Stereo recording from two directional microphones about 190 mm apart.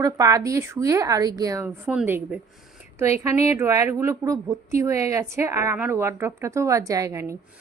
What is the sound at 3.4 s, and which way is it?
A woman's voice, 15° right (ahead or behind).